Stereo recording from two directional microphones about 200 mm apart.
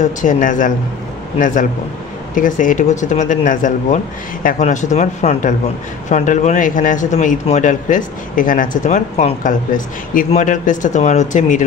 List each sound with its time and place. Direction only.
0.0 s a man's voice: 40° left (ahead or behind)